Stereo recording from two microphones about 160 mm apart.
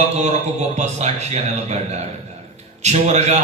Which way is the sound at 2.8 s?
45° right (ahead or behind).